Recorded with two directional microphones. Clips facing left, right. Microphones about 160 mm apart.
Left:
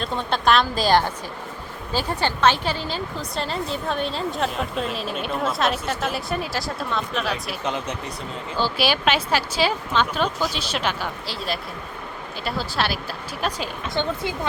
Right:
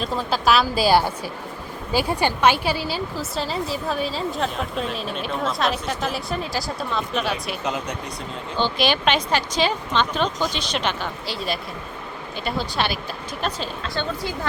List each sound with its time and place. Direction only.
0.0 s a woman's voice: centre (ahead or behind)
13.9 s a woman's voice: 20° left (ahead or behind)